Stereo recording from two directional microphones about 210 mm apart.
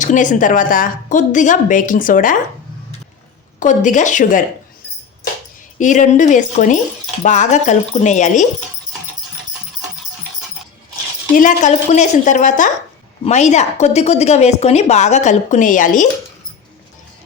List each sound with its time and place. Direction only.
0.0 s a woman's voice: 35° left (ahead or behind)
3.6 s a woman's voice: 35° left (ahead or behind)
5.8 s a woman's voice: 35° left (ahead or behind)
11.3 s a woman's voice: 35° left (ahead or behind)